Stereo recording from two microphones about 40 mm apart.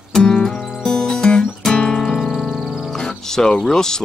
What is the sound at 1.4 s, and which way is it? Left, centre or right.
Music, centre.